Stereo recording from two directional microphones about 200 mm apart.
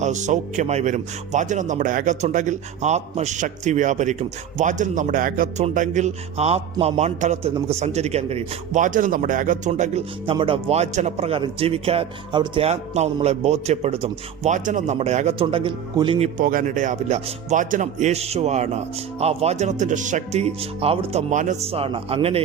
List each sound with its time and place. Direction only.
0.0 s a man's voice: 35° right (ahead or behind)